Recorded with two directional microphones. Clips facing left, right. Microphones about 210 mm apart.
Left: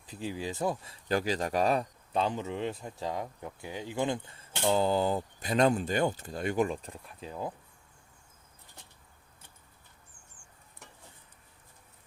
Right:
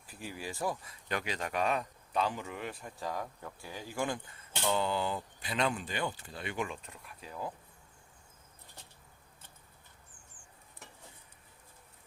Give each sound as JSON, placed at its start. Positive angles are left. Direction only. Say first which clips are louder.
{"t": 0.1, "sound": "speech", "louder": "left 6 dB", "side_deg": 20}
{"t": 4.7, "sound": "speech", "louder": "left 6 dB", "side_deg": 40}